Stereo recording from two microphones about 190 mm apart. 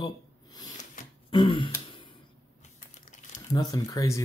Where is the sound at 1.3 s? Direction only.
25° left (ahead or behind).